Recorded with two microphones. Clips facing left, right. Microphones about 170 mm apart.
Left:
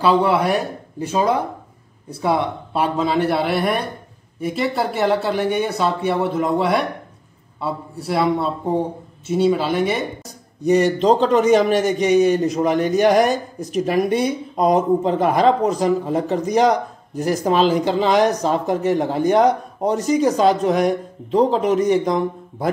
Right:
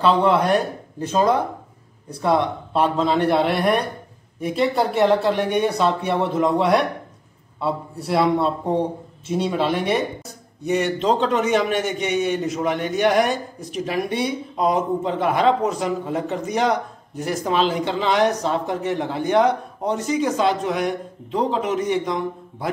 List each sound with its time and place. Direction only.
0.0 s speech: 10° left (ahead or behind)
10.6 s speech: 35° left (ahead or behind)